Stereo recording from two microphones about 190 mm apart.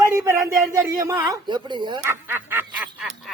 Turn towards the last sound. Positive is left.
turn(degrees=-5)  # may be behind; listen again after turning